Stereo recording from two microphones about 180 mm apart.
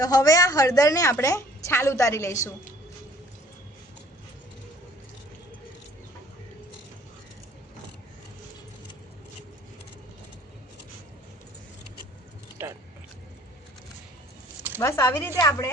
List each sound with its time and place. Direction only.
0.0 s a woman's voice: 20° left (ahead or behind)
12.6 s a sound: 10° right (ahead or behind)
14.8 s a woman's voice: 15° left (ahead or behind)